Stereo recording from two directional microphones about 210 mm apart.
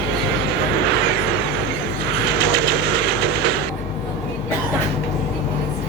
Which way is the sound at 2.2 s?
55° right (ahead or behind).